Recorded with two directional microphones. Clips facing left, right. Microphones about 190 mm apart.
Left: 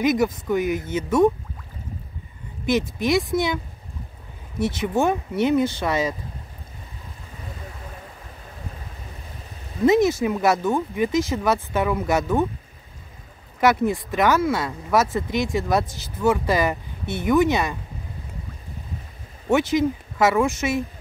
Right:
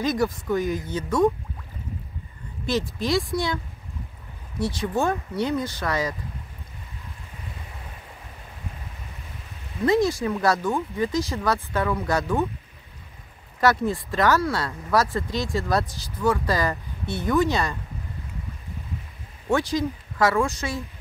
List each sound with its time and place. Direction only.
0.0 s speech: 20° left (ahead or behind)
2.6 s speech: 20° left (ahead or behind)
4.6 s speech: 20° left (ahead or behind)
9.8 s speech: 20° left (ahead or behind)
13.6 s speech: 20° left (ahead or behind)
19.5 s speech: 20° left (ahead or behind)